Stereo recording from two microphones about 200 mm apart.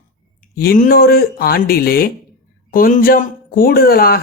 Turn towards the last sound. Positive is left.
turn(degrees=50)  # may be behind; listen again after turning